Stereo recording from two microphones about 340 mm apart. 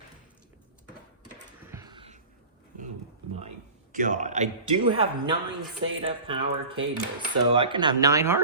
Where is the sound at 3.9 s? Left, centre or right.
Right.